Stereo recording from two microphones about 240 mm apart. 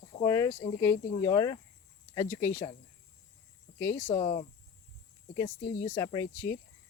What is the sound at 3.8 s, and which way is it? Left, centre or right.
Speech, centre.